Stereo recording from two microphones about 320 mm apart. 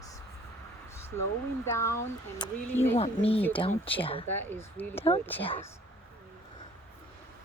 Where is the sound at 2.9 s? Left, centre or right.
Centre.